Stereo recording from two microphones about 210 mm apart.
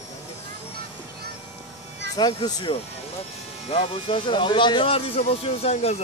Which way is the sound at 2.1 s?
20° left (ahead or behind).